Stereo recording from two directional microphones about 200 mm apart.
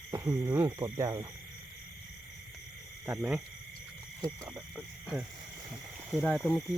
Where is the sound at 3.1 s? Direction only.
10° right (ahead or behind).